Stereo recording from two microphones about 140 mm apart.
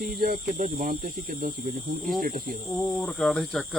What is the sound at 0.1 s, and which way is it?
Speech, 90° right.